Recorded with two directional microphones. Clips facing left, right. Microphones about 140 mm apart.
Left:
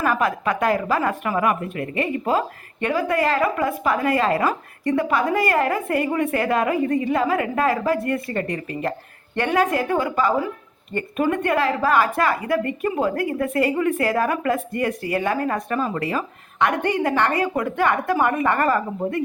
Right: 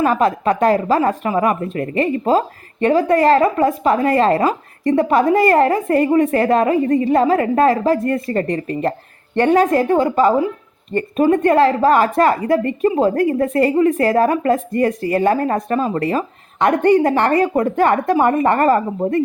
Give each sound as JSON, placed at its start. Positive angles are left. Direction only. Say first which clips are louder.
{"t": 0.0, "sound": "a woman's voice", "louder": "right 6 dB", "side_deg": -30}